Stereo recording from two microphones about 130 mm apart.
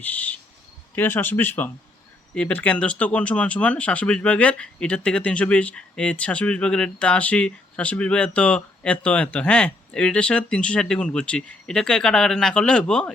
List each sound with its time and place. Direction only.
0.0 s speech: 10° left (ahead or behind)